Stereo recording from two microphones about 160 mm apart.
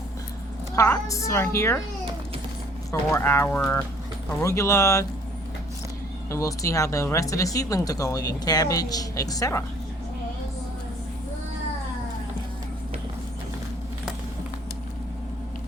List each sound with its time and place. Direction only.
0.8 s a woman's voice: 20° left (ahead or behind)
2.9 s a woman's voice: 15° left (ahead or behind)
6.3 s speech: 20° left (ahead or behind)